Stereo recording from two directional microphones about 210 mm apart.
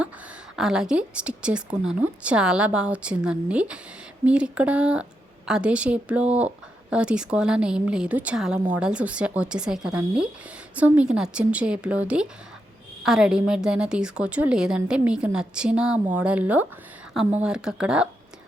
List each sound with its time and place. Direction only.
0.5 s a woman's voice: 5° right (ahead or behind)